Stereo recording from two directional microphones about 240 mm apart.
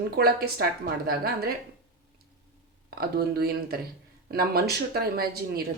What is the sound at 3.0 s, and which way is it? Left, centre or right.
Speech, right.